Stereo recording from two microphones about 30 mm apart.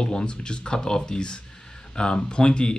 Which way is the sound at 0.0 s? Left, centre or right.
Left.